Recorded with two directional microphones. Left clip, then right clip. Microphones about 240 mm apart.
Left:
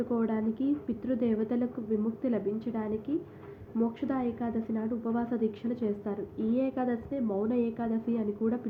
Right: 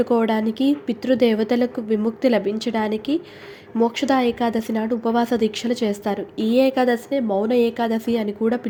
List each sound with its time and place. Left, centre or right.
0.0 s a woman's voice: right